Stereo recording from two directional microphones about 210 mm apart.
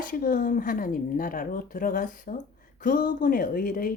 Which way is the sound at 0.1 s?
40° left (ahead or behind).